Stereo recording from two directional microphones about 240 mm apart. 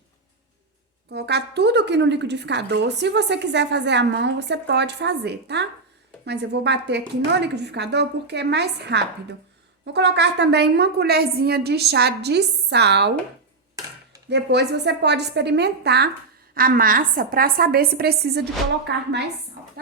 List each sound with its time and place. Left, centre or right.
1.1 s a woman's voice: right
14.3 s a woman's voice: right